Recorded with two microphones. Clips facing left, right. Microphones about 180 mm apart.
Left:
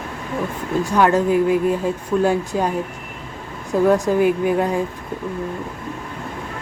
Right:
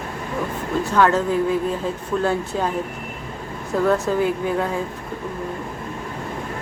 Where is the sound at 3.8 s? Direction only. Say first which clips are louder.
Left 4 dB; 15° left (ahead or behind).